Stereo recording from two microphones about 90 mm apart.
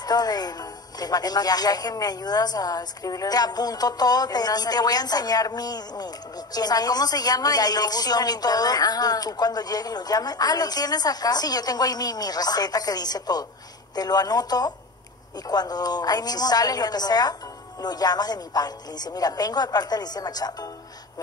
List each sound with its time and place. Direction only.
0.0 s a woman's voice: 45° left (ahead or behind)